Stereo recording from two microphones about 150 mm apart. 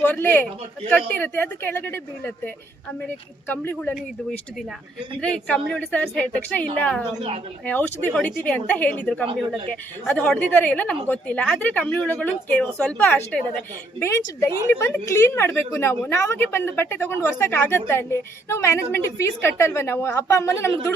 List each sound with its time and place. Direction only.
0.0 s a woman's voice: 10° left (ahead or behind)
3.5 s a woman's voice: 10° left (ahead or behind)